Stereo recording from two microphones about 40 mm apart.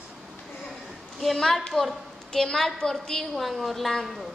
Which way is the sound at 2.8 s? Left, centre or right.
Left.